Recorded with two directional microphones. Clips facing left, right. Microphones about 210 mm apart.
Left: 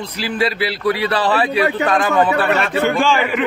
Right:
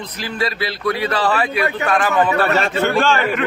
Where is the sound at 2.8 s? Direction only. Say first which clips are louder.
Even; 15° left (ahead or behind).